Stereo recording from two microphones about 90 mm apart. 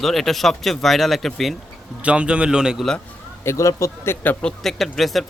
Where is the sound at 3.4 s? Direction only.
35° left (ahead or behind).